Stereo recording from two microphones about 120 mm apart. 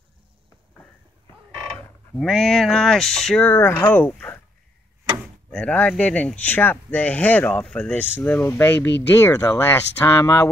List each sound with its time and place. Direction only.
2.1 s speech: 5° left (ahead or behind)
3.4 s speech: 20° left (ahead or behind)
5.5 s speech: 10° left (ahead or behind)